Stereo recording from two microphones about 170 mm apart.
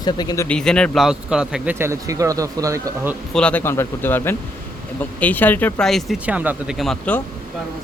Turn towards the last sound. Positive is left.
turn(degrees=5)  # may be behind; listen again after turning